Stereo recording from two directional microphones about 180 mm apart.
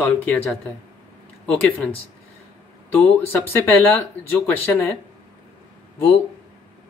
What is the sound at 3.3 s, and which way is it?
Speech, 10° left (ahead or behind).